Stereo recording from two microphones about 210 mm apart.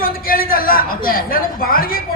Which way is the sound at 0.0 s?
45° left (ahead or behind).